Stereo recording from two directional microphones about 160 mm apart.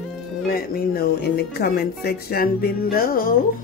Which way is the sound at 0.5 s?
70° left (ahead or behind).